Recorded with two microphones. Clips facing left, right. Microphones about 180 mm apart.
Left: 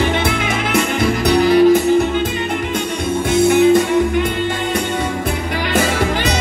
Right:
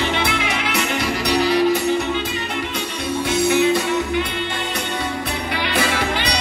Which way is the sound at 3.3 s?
50° left (ahead or behind).